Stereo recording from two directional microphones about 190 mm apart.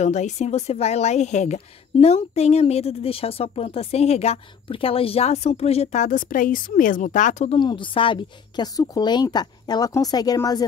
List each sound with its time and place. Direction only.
0.0 s a woman's voice: 40° left (ahead or behind)
7.5 s a woman's voice: 25° left (ahead or behind)